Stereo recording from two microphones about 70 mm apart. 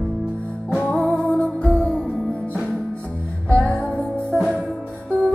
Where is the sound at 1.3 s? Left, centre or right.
Centre.